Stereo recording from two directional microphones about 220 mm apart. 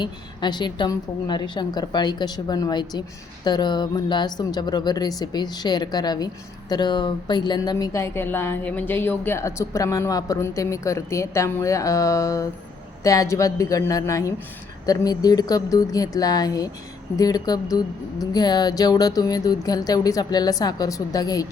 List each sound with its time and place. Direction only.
0.0 s a woman's voice: 20° left (ahead or behind)